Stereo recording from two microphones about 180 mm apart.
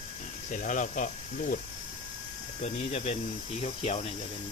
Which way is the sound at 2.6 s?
40° left (ahead or behind).